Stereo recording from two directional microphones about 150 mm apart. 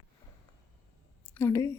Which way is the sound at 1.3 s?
20° left (ahead or behind).